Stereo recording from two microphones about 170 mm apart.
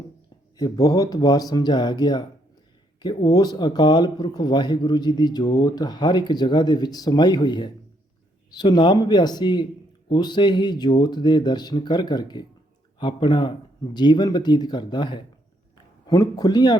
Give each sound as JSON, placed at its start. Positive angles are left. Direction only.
{"t": 0.5, "sound": "speech", "side_deg": 20}